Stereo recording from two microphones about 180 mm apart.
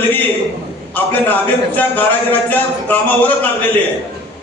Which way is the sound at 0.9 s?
10° left (ahead or behind).